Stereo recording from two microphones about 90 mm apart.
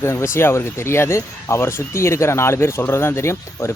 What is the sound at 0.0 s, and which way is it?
Speech, 30° left (ahead or behind).